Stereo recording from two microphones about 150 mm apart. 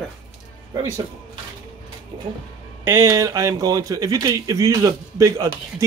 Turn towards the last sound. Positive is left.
turn(degrees=-20)  # may be behind; listen again after turning